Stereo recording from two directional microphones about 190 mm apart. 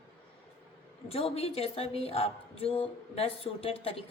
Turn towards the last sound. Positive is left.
turn(degrees=30)  # may be behind; listen again after turning